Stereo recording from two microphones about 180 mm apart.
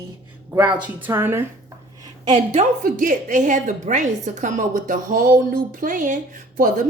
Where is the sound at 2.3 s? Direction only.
40° right (ahead or behind).